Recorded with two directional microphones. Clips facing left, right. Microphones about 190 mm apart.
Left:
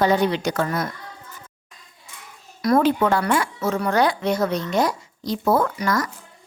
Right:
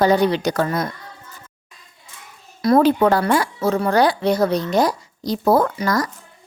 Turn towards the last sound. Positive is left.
turn(degrees=-35)  # may be behind; listen again after turning